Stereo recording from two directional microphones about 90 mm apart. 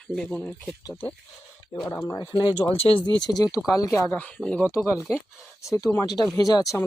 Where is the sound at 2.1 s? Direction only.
60° left (ahead or behind).